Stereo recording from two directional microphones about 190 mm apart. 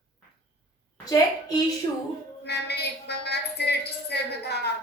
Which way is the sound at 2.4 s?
60° left (ahead or behind).